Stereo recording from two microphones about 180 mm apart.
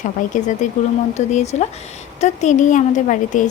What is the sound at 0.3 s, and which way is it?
Speech, 40° left (ahead or behind).